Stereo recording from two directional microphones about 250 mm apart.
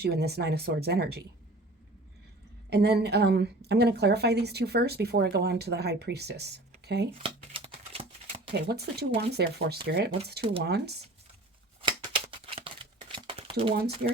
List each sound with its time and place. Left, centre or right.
0.0 s a woman's voice: right
2.6 s a woman's voice: right
7.2 s a sound: right
8.6 s a woman's voice: right
12.5 s crumpling: right